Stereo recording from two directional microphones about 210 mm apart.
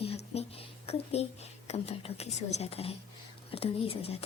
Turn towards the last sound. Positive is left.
turn(degrees=25)  # may be behind; listen again after turning